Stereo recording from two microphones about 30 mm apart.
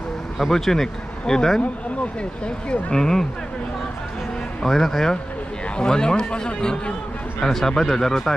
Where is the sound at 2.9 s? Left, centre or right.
Centre.